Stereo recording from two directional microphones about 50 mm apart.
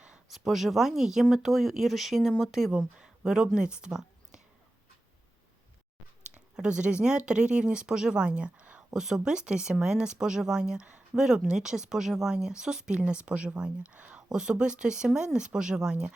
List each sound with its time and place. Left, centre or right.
0.3 s speech: centre
2.7 s a woman's voice: centre
6.6 s speech: right
8.9 s speech: centre; by 14.2 s right
14.2 s speech: centre